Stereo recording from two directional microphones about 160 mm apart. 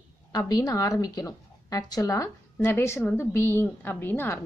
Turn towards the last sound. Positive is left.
turn(degrees=15)  # may be behind; listen again after turning